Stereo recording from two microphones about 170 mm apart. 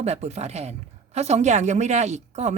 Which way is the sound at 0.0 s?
40° right (ahead or behind).